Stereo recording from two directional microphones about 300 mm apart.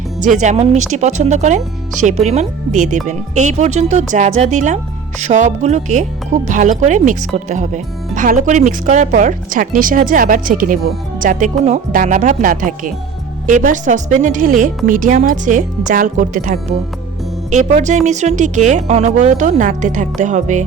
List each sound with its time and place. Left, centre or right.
0.2 s speech: right